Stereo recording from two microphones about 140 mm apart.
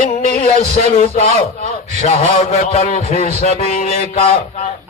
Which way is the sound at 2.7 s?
50° left (ahead or behind).